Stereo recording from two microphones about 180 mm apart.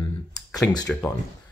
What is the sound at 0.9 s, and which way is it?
Speech, 5° left (ahead or behind).